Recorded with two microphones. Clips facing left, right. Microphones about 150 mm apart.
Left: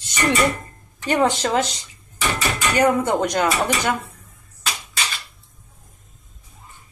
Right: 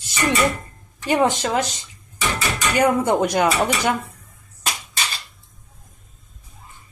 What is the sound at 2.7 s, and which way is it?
Speech, 10° right (ahead or behind).